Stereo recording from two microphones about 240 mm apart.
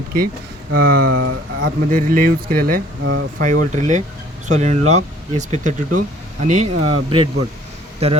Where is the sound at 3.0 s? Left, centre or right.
Right.